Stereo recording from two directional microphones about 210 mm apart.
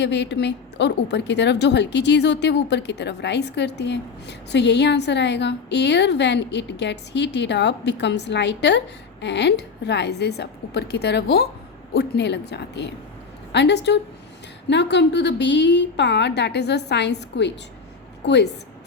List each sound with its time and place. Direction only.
0.0 s a woman's voice: 55° left (ahead or behind)